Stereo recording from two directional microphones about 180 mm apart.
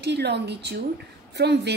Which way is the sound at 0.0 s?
70° right (ahead or behind).